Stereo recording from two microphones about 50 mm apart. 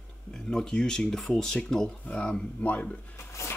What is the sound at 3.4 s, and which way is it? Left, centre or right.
Zipper, left.